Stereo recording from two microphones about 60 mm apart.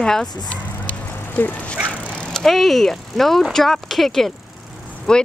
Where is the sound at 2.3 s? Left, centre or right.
Centre.